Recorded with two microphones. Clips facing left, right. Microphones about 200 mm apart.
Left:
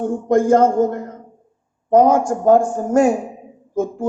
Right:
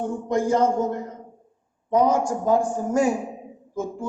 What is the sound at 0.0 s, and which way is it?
A woman's voice, 50° left (ahead or behind).